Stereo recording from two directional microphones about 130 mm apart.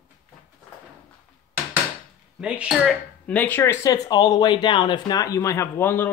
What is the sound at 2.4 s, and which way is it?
Speech, 10° right (ahead or behind).